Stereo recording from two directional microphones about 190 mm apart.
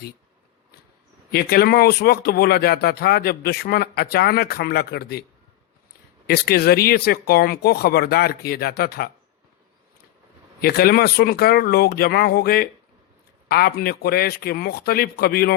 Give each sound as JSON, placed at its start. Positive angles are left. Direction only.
{"t": 1.3, "sound": "speech", "side_deg": 55}
{"t": 6.2, "sound": "speech", "side_deg": 55}
{"t": 10.6, "sound": "speech", "side_deg": 55}